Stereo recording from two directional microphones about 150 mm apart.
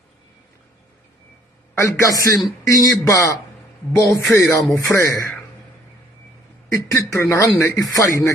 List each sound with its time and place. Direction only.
1.8 s speech: 20° left (ahead or behind)
6.7 s speech: 20° left (ahead or behind)